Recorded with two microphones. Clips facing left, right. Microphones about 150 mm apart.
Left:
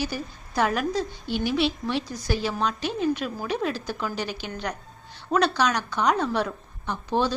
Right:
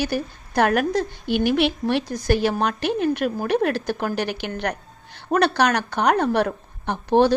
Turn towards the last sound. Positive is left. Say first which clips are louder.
# right 8 dB
turn(degrees=-60)  # may be behind; listen again after turning